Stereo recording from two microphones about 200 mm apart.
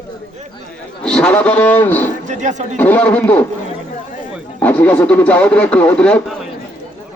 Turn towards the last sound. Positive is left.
turn(degrees=5)  # may be behind; listen again after turning